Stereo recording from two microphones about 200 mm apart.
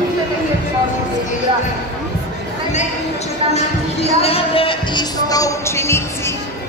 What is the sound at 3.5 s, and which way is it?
Music, 30° left (ahead or behind).